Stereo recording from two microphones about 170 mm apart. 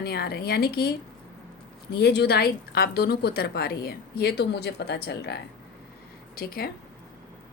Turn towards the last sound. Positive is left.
turn(degrees=65)  # may be behind; listen again after turning